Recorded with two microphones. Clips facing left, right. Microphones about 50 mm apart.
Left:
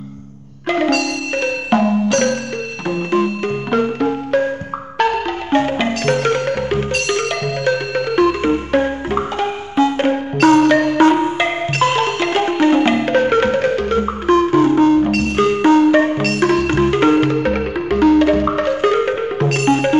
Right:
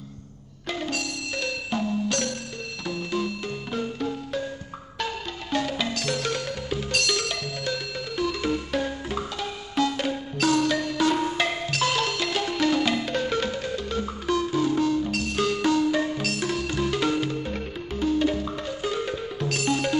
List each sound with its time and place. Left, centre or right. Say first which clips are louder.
0.7 s marimba: left 14 dB; left
1.3 s music: left 12 dB; left
5.5 s music: left 10 dB; left
6.9 s music: left 8 dB; left
11.1 s music: left 8 dB; left